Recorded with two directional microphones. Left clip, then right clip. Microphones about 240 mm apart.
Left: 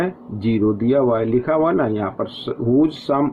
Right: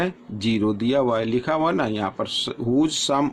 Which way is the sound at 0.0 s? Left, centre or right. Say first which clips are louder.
Left 2 dB; right.